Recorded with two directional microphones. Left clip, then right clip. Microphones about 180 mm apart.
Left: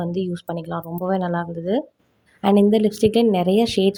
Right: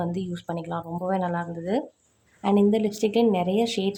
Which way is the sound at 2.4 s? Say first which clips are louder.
Left 5 dB; 35° left (ahead or behind).